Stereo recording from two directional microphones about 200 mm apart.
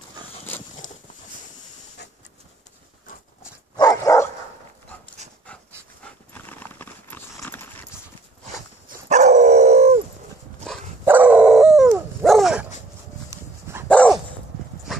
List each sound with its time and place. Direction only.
0.5 s a sound: 10° left (ahead or behind)
3.7 s dog: 20° left (ahead or behind)
6.3 s clip-clop: 10° left (ahead or behind)
9.1 s dog: 35° right (ahead or behind)
11.1 s dog: 10° right (ahead or behind)
13.3 s dog: 10° right (ahead or behind)
13.8 s dog: 5° left (ahead or behind)